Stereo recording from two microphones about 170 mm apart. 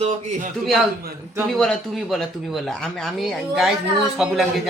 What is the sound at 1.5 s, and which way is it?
Speech, centre (ahead or behind).